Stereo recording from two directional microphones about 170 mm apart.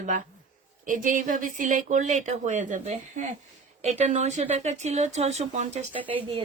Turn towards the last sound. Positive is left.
turn(degrees=-35)  # may be behind; listen again after turning